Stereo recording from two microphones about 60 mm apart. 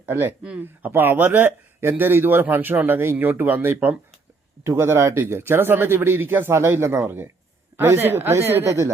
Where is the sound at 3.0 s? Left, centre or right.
Right.